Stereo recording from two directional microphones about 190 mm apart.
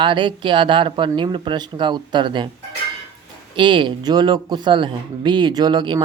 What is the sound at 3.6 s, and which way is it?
Speech, 25° right (ahead or behind).